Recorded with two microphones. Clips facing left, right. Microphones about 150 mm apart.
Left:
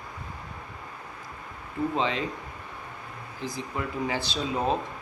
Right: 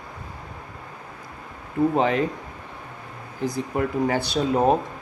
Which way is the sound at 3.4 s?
50° right (ahead or behind).